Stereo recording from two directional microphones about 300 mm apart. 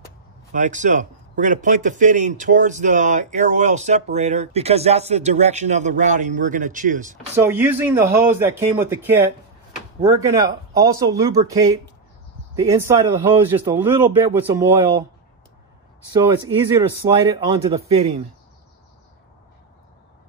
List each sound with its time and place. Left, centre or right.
0.5 s a man's voice: right
7.3 s speech: centre
10.3 s speech: centre
12.8 s speech: centre
16.1 s speech: centre